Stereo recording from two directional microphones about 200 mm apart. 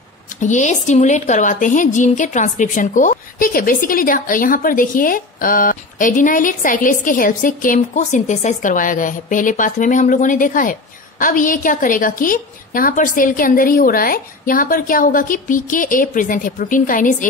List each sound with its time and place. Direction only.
0.4 s a woman's voice: 40° left (ahead or behind)